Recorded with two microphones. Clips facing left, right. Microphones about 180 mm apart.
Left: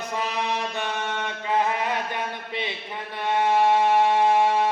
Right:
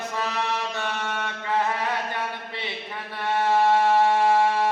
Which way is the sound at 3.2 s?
20° left (ahead or behind).